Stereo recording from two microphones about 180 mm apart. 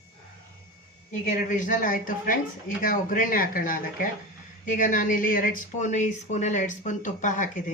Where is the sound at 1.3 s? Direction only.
45° left (ahead or behind).